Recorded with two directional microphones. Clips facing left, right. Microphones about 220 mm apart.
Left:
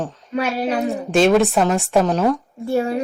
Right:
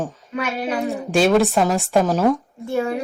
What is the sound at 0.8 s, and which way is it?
Speech, centre (ahead or behind).